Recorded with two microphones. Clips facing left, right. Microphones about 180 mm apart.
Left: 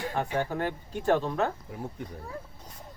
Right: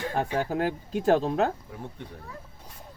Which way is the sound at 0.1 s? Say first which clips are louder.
Right 3 dB; 35° right (ahead or behind).